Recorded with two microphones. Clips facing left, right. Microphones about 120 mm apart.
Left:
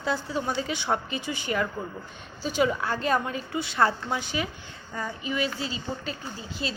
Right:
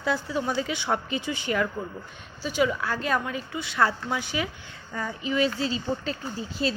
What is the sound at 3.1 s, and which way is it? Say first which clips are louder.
Speech: left 1 dB; 40° left (ahead or behind).